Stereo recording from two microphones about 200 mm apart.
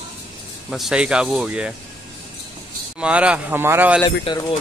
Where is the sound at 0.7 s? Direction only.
5° right (ahead or behind).